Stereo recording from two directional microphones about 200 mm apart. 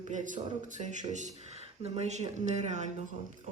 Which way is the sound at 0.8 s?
35° right (ahead or behind).